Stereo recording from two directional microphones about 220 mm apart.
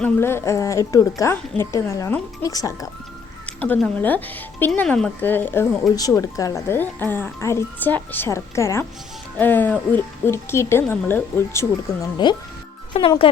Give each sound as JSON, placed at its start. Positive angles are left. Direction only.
{"t": 0.0, "sound": "speech", "side_deg": 10}